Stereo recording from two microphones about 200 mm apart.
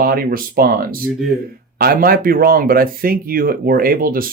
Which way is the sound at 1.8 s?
50° right (ahead or behind).